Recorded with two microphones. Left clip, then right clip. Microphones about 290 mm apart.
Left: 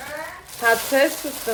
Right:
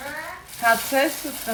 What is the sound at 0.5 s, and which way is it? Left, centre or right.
Speech, centre.